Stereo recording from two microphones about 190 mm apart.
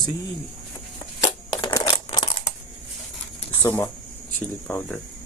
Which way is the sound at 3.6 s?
10° left (ahead or behind).